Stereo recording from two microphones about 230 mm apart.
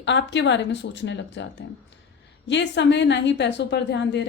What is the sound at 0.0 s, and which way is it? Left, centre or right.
A woman's voice, left.